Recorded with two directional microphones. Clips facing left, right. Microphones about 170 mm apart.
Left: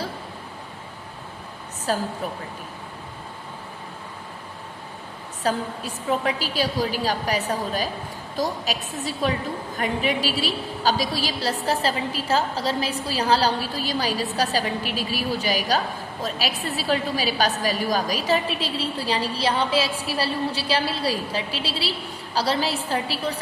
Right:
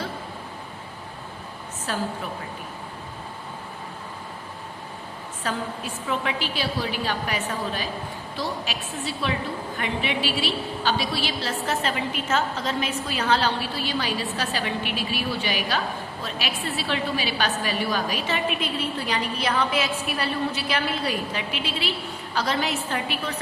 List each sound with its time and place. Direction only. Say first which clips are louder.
1.9 s a woman's voice: left 4 dB; 40° left (ahead or behind)
5.4 s a woman's voice: left 4 dB; 40° left (ahead or behind)